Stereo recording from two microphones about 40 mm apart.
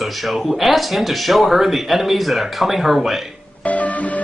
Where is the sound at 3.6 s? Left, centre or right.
Left.